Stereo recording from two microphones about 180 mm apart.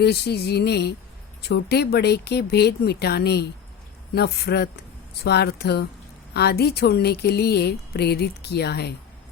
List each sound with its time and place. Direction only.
0.0 s speech: 65° left (ahead or behind)